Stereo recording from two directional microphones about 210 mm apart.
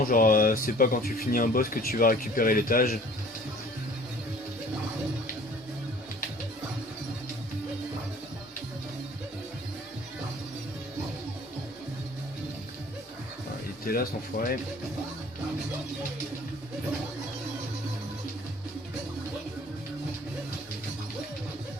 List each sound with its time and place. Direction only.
0.0 s speech: 40° left (ahead or behind)
13.8 s speech: 45° left (ahead or behind)